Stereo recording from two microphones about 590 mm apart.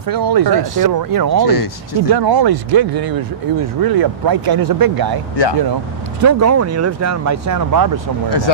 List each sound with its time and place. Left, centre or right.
0.1 s speech: right
1.5 s speech: left
2.0 s speech: right
6.2 s speech: right